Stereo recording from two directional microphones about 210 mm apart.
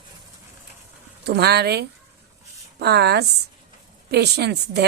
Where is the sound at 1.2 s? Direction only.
50° right (ahead or behind).